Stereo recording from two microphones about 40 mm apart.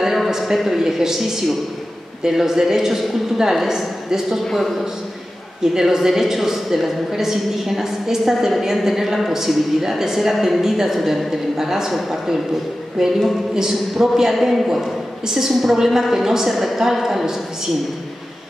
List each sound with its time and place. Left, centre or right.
0.0 s a sound: centre
0.7 s a woman's voice: centre
4.5 s a man's voice: centre
5.8 s a woman's voice: centre